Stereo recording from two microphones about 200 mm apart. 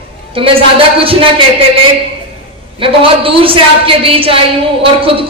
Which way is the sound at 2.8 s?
25° right (ahead or behind).